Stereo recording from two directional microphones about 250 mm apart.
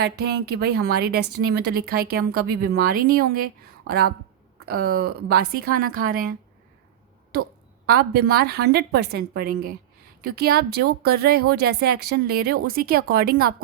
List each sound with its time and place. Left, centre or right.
0.0 s a woman's voice: right
7.9 s a woman's voice: right